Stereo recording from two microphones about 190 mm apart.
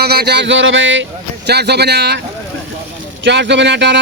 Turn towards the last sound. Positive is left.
turn(degrees=-65)  # may be behind; listen again after turning